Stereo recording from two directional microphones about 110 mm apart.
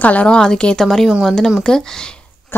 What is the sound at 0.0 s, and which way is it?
A woman's voice, 15° left (ahead or behind).